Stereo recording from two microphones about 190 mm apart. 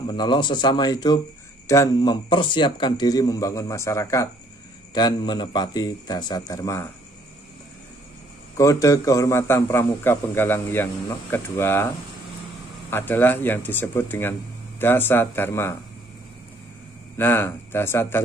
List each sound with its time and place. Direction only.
0.0 s a man's voice: 25° left (ahead or behind)
8.5 s a man's voice: 15° left (ahead or behind)
12.9 s a man's voice: 10° left (ahead or behind)
17.2 s a man's voice: 10° left (ahead or behind)